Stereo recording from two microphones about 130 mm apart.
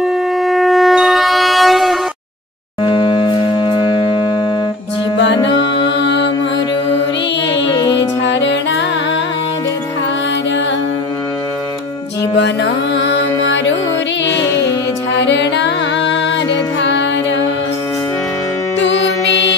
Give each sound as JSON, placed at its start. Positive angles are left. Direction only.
{"t": 0.0, "sound": "shofar", "side_deg": 0}
{"t": 2.8, "sound": "civil defense siren", "side_deg": 40}
{"t": 7.6, "sound": "music", "side_deg": 35}